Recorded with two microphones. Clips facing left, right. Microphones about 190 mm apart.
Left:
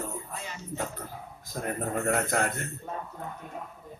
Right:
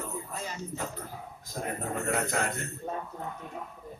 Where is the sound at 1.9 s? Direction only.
50° left (ahead or behind).